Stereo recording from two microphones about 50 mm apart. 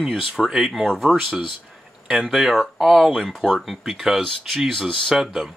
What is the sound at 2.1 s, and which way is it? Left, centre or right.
Speech, centre.